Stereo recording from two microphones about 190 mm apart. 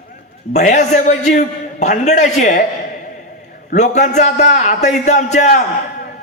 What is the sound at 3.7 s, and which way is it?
A man's voice, 40° left (ahead or behind).